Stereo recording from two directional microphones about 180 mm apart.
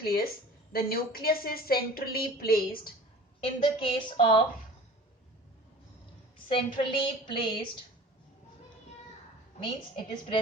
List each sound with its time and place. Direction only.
0.0 s a woman's voice: 55° left (ahead or behind)
3.4 s a woman's voice: 30° left (ahead or behind)
6.5 s a woman's voice: 30° left (ahead or behind)
9.9 s a woman's voice: 30° left (ahead or behind)